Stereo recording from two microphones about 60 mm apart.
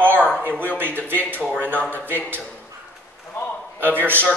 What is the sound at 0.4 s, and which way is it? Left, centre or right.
A woman's voice, right.